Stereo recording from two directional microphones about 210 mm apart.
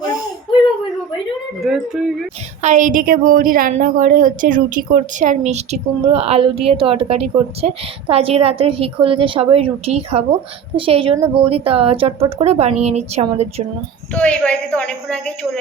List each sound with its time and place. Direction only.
1.6 s a woman's voice: centre (ahead or behind)
2.6 s a woman's voice: 35° right (ahead or behind)
14.1 s a woman's voice: 5° left (ahead or behind)